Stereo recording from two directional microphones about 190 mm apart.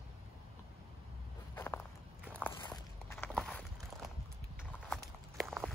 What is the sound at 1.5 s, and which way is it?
Walk, 10° left (ahead or behind).